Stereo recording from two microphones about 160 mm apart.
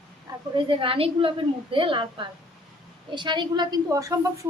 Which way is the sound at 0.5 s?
35° right (ahead or behind).